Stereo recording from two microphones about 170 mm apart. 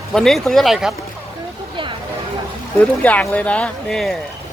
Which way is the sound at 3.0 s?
10° left (ahead or behind).